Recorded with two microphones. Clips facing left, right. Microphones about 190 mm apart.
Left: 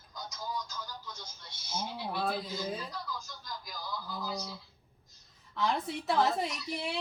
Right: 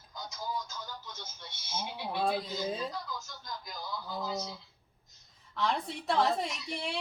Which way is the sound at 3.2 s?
25° right (ahead or behind).